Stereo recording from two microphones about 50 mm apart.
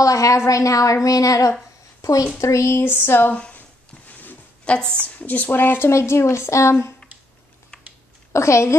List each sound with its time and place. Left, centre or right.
0.1 s a sound: left
0.5 s a woman's voice: left
2.4 s a woman's voice: left
2.8 s a sound: left
4.1 s a sound: left
4.6 s a woman's voice: centre
5.0 s speech: left
5.9 s a woman's voice: left
8.3 s a woman's voice: left